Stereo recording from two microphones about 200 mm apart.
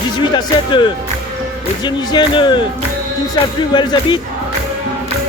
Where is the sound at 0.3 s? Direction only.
25° left (ahead or behind).